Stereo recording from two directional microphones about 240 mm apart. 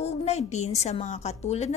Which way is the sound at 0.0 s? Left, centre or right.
Left.